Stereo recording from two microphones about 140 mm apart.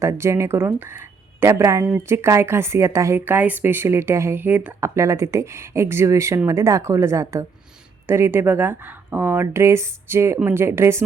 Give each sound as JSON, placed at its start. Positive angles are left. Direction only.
{"t": 0.0, "sound": "speech", "side_deg": -20}